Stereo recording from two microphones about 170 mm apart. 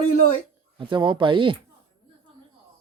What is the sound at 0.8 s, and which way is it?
Speech, 25° right (ahead or behind).